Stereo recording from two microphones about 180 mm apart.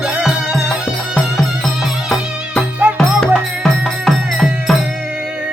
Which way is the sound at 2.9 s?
5° left (ahead or behind).